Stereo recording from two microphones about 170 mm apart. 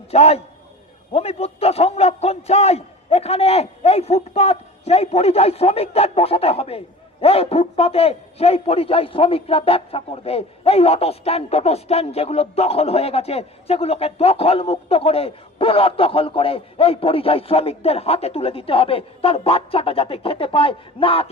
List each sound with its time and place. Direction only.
0.1 s a man's voice: 35° left (ahead or behind)